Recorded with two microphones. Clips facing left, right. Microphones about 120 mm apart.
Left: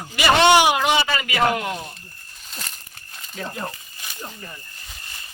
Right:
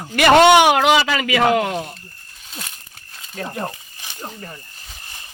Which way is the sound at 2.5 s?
Centre (ahead or behind).